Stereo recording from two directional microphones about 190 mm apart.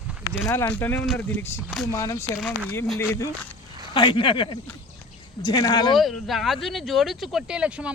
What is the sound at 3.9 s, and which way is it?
Speech, 25° left (ahead or behind).